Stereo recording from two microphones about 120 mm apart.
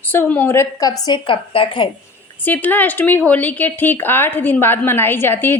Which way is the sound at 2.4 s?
15° left (ahead or behind).